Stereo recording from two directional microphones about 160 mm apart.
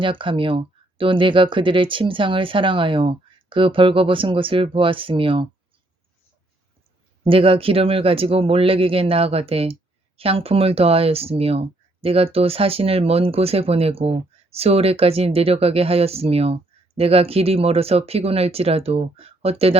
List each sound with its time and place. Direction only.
0.0 s speech: 30° right (ahead or behind)
7.3 s speech: 35° right (ahead or behind)